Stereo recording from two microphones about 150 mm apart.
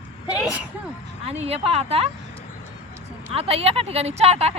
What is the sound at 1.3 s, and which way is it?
Speech, 45° right (ahead or behind).